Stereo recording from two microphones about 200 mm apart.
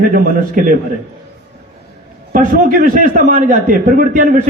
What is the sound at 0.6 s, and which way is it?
Speech, 45° right (ahead or behind).